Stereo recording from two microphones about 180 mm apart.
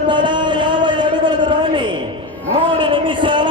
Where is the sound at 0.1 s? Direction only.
25° right (ahead or behind).